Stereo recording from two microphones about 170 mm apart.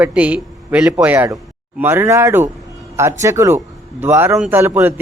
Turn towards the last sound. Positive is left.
turn(degrees=-10)  # may be behind; listen again after turning